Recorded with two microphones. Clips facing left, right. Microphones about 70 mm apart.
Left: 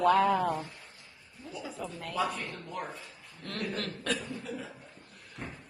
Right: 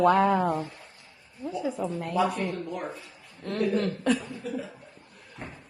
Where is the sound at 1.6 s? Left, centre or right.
Right.